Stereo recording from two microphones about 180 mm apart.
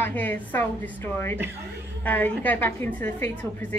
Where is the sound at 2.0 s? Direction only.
10° left (ahead or behind).